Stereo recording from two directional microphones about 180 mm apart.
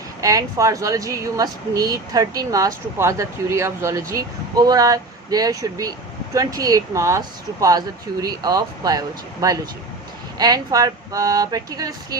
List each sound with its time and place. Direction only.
0.2 s speech: 20° right (ahead or behind)